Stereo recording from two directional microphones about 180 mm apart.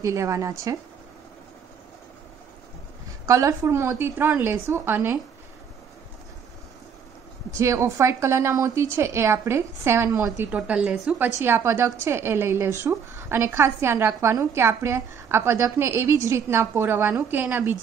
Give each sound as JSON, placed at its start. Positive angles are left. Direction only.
{"t": 0.0, "sound": "a woman's voice", "side_deg": -15}
{"t": 3.3, "sound": "a woman's voice", "side_deg": -15}
{"t": 7.5, "sound": "a woman's voice", "side_deg": -15}